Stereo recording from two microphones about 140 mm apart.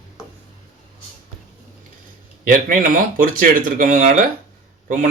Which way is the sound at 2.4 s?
75° right (ahead or behind).